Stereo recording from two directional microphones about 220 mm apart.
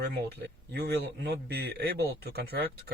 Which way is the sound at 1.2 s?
45° right (ahead or behind).